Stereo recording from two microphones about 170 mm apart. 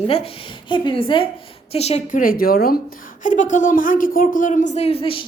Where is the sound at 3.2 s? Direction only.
50° left (ahead or behind); by 5.2 s 30° left (ahead or behind).